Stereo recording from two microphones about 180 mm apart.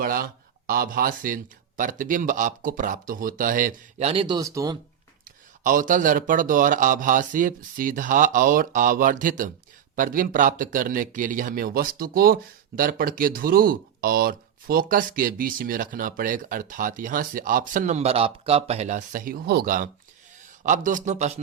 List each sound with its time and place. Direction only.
0.0 s speech: 55° right (ahead or behind); by 4.8 s 20° right (ahead or behind)
5.2 s speech: 50° right (ahead or behind)